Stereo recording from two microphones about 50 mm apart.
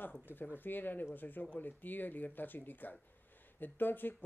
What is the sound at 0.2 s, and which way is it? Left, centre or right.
A woman's voice, left.